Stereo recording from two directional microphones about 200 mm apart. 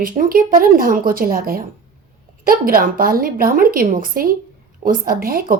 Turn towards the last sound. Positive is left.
turn(degrees=-45)  # may be behind; listen again after turning